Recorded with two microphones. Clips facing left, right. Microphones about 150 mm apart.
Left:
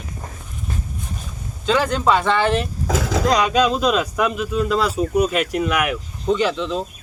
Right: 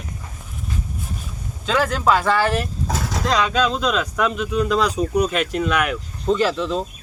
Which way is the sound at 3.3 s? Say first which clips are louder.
Left 1 dB; 15° left (ahead or behind).